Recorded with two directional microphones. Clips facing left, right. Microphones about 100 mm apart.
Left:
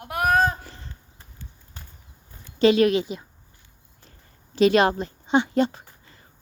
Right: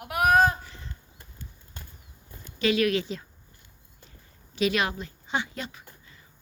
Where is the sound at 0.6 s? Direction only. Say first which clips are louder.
Left 2 dB; 45° left (ahead or behind).